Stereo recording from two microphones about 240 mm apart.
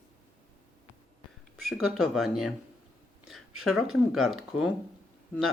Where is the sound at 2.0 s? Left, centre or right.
Centre.